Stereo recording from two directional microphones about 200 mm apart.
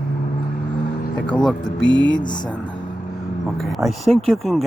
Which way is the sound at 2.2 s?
20° left (ahead or behind).